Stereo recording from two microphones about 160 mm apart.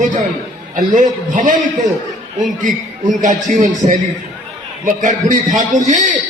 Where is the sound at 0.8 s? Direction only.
55° right (ahead or behind).